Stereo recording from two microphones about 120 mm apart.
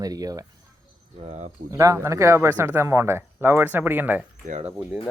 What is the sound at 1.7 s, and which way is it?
Speech, 25° right (ahead or behind).